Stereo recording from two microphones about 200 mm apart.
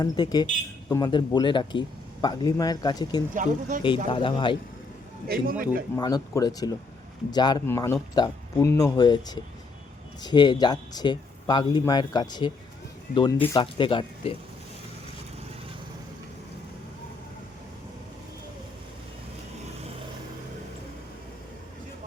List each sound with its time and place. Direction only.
0.0 s speech: 20° left (ahead or behind)
3.3 s speech: 40° right (ahead or behind)
3.8 s speech: 25° left (ahead or behind)
5.3 s a man's voice: 45° right (ahead or behind)
6.0 s speech: 20° left (ahead or behind)